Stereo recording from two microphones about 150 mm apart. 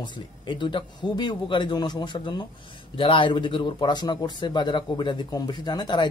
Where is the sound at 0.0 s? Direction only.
30° left (ahead or behind).